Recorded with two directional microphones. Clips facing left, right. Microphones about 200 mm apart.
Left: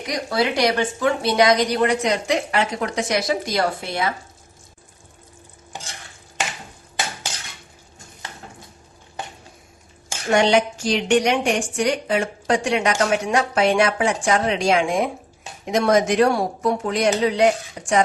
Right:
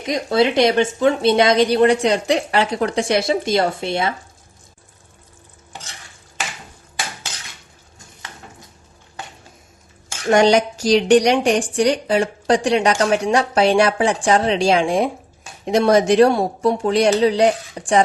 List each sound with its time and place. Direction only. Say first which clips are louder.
0.0 s speech: right 5 dB; 25° right (ahead or behind)
10.3 s a woman's voice: right 3 dB; 40° right (ahead or behind)